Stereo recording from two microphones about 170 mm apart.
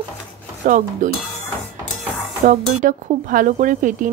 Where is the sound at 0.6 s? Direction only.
45° right (ahead or behind).